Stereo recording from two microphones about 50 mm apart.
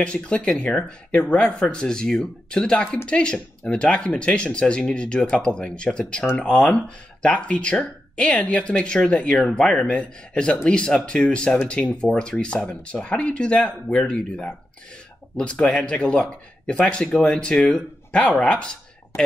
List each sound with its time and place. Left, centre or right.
0.0 s speech: left
11.2 s speech: left